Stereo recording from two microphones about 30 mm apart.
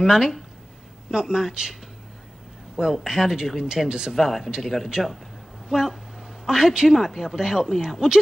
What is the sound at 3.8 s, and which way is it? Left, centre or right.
Speech, right.